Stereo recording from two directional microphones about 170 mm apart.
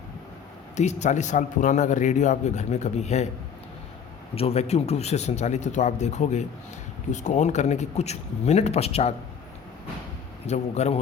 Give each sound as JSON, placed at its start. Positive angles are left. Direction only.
{"t": 0.8, "sound": "speech", "side_deg": 40}
{"t": 4.4, "sound": "speech", "side_deg": 35}
{"t": 10.4, "sound": "speech", "side_deg": 40}